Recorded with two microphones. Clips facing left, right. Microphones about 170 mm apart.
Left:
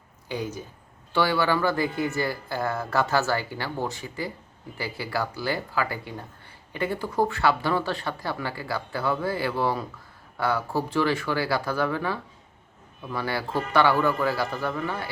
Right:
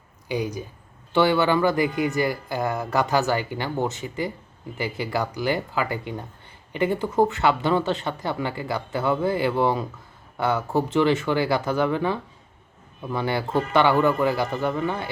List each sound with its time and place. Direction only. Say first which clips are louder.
0.3 s speech: right 4 dB; 15° right (ahead or behind)